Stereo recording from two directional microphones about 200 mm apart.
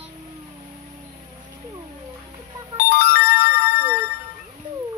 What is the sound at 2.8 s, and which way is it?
Music, 50° left (ahead or behind).